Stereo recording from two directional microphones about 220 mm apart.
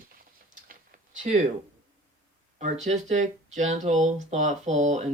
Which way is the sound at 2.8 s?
30° right (ahead or behind).